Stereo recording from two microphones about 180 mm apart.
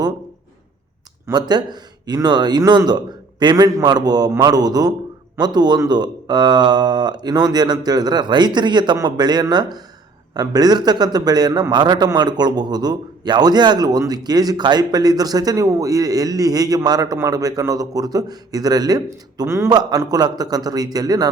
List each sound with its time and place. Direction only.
1.3 s a man's voice: 25° right (ahead or behind)